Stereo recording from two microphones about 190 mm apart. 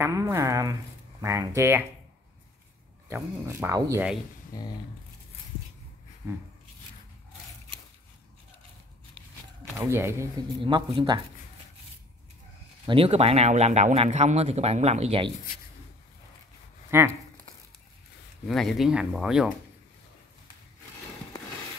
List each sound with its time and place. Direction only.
0.0 s speech: 15° right (ahead or behind)
3.1 s speech: 15° right (ahead or behind)
4.5 s speech: 20° left (ahead or behind)
6.2 s speech: 15° right (ahead or behind)
9.2 s a sound: 30° right (ahead or behind)
9.8 s speech: 15° right (ahead or behind)
10.6 s speech: 25° right (ahead or behind)
12.8 s speech: 30° right (ahead or behind)
16.9 s speech: 10° right (ahead or behind)
18.5 s speech: centre (ahead or behind)